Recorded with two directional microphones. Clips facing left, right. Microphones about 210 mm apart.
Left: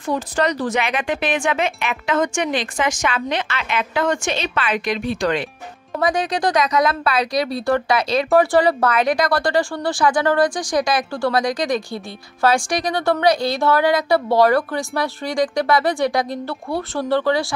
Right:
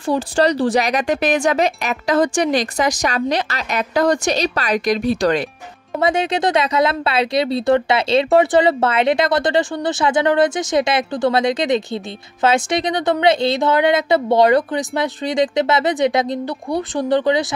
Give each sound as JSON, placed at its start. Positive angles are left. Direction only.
{"t": 0.0, "sound": "a woman's voice", "side_deg": -30}
{"t": 5.9, "sound": "speech", "side_deg": -25}